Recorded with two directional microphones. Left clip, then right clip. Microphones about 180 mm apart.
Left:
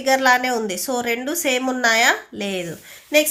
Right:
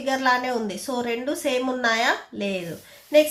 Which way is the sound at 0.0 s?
30° left (ahead or behind).